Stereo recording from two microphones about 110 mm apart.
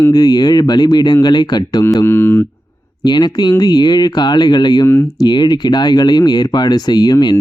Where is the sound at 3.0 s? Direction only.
40° left (ahead or behind).